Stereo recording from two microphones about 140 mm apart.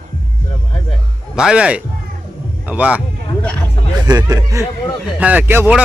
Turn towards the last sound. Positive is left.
turn(degrees=-15)  # may be behind; listen again after turning